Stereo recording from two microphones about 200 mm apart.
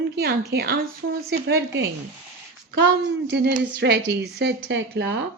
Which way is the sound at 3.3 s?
55° right (ahead or behind).